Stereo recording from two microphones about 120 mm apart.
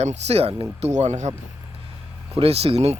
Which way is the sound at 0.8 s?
70° right (ahead or behind).